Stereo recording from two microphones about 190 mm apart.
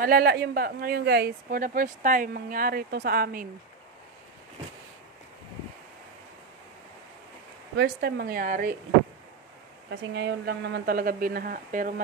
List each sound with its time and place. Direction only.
0.0 s speech: 55° right (ahead or behind)
7.7 s speech: 60° right (ahead or behind)
9.8 s speech: 60° right (ahead or behind)